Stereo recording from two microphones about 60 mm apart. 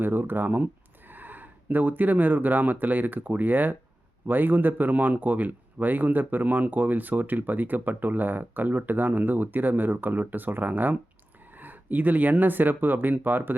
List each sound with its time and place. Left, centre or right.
0.0 s speech: right